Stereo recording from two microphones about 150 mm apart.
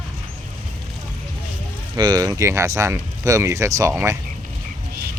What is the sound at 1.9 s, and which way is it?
Speech, 25° right (ahead or behind).